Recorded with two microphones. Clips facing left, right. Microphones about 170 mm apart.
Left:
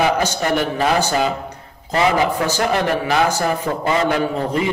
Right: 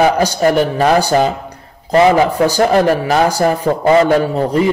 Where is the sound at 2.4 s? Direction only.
35° right (ahead or behind).